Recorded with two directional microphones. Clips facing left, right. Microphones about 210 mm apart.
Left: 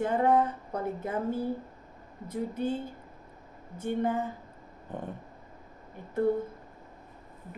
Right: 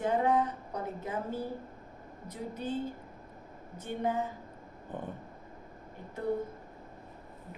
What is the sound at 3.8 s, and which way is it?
Speech, 55° left (ahead or behind).